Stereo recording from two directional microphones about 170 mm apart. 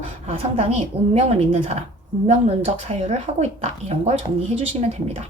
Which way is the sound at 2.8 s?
40° right (ahead or behind).